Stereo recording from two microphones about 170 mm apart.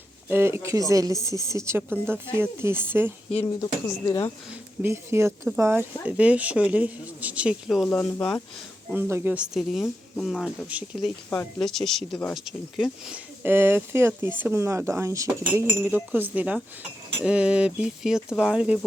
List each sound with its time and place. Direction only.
0.3 s speech: 15° right (ahead or behind)
3.4 s speech: 25° left (ahead or behind)
4.8 s speech: 15° right (ahead or behind)
7.9 s speech: 10° left (ahead or behind)
8.9 s speech: 15° right (ahead or behind); by 10.7 s 5° left (ahead or behind)
10.7 s speech: 10° right (ahead or behind)
11.3 s speech: 10° left (ahead or behind)